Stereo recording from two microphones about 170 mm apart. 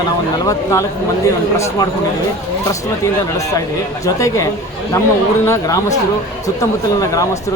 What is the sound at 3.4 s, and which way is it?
Speech, 20° left (ahead or behind).